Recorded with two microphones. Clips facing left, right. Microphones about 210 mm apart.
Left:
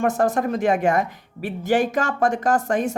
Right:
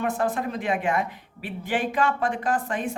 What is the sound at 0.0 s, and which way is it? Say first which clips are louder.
Speech: left 5 dB; 45° left (ahead or behind).